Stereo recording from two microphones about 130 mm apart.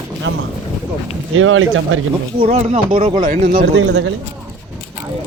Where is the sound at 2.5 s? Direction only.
60° right (ahead or behind); by 3.2 s 45° right (ahead or behind).